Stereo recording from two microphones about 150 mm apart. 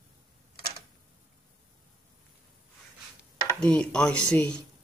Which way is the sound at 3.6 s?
5° left (ahead or behind).